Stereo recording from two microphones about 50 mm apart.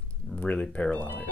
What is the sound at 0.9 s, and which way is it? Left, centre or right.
Speech, left.